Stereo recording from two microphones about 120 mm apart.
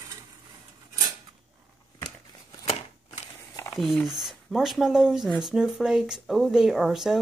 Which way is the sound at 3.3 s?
25° left (ahead or behind).